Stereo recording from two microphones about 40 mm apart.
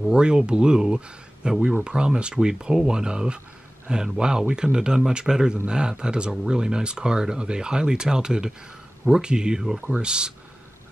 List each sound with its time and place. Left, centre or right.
0.1 s speech: centre